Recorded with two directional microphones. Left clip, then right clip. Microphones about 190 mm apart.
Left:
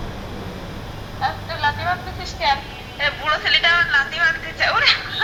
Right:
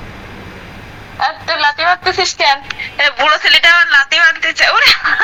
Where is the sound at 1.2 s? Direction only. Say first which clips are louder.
Right 8 dB; 45° right (ahead or behind).